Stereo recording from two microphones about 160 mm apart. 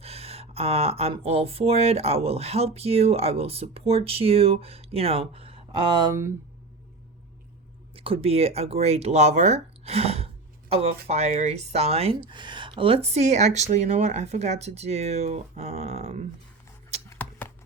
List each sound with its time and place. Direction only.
0.0 s speech: 40° right (ahead or behind)
7.9 s speech: 35° right (ahead or behind)
17.1 s a sound: 10° left (ahead or behind)